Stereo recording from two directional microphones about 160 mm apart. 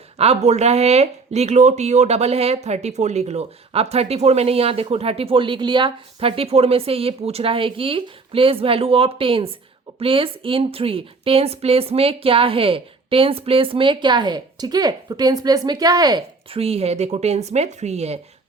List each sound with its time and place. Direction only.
0.2 s speech: 40° right (ahead or behind); by 16.2 s 25° right (ahead or behind)
16.5 s speech: 40° right (ahead or behind)